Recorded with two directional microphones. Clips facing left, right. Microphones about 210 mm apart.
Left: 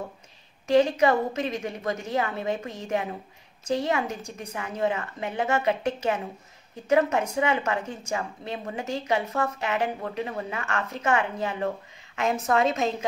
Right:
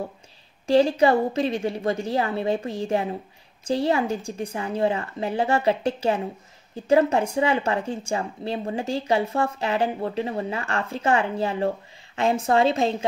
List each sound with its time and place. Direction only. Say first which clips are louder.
0.7 s speech: right 2 dB; 30° right (ahead or behind)